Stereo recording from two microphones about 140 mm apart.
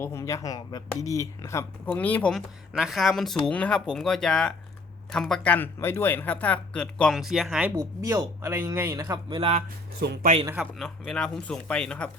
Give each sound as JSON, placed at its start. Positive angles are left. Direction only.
{"t": 0.0, "sound": "speech", "side_deg": 20}
{"t": 1.9, "sound": "speech", "side_deg": 10}
{"t": 2.7, "sound": "speech", "side_deg": 0}
{"t": 7.8, "sound": "speech", "side_deg": -20}
{"t": 10.4, "sound": "a man's voice", "side_deg": -10}
{"t": 10.8, "sound": "speech", "side_deg": 5}